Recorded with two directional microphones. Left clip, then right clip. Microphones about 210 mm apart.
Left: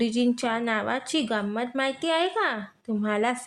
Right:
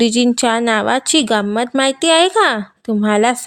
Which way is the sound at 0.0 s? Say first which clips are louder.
Right 11 dB; 50° right (ahead or behind).